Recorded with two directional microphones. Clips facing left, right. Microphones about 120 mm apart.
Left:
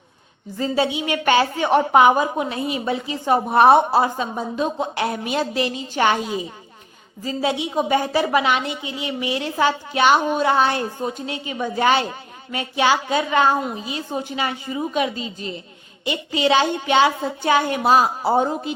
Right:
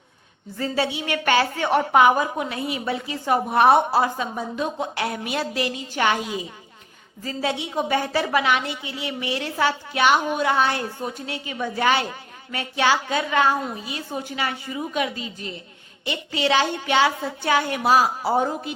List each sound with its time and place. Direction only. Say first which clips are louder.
0.5 s a woman's voice: left 4 dB; 20° left (ahead or behind)
7.2 s a woman's voice: left 4 dB; 15° left (ahead or behind)